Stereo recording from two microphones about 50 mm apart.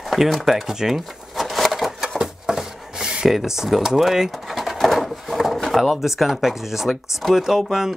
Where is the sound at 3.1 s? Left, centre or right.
Centre.